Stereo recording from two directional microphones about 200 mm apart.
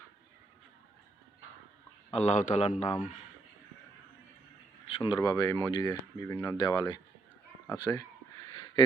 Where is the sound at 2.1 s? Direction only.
35° left (ahead or behind).